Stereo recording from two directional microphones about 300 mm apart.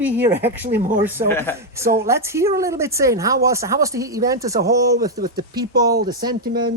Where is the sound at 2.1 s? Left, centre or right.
Centre.